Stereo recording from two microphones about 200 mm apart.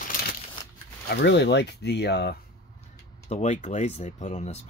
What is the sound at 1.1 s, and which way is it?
Speech, 60° left (ahead or behind).